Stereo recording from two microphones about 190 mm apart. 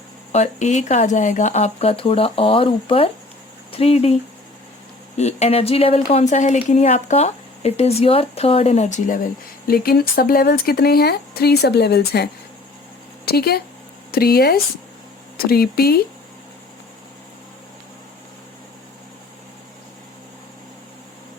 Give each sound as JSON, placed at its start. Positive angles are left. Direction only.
{"t": 0.3, "sound": "a woman's voice", "side_deg": 40}